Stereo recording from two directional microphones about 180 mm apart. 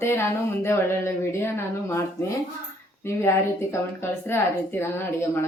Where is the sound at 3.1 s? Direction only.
15° left (ahead or behind).